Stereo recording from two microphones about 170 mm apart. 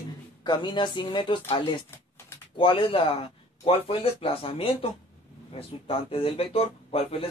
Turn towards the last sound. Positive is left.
turn(degrees=35)  # may be behind; listen again after turning